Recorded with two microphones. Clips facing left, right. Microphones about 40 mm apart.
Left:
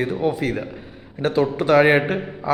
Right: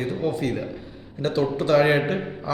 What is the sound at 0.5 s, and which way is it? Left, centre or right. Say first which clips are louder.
Speech: left 1 dB; left.